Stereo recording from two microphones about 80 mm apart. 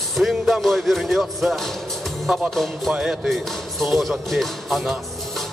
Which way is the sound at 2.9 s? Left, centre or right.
Centre.